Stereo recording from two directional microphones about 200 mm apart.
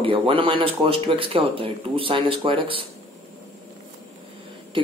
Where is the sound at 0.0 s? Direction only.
25° right (ahead or behind).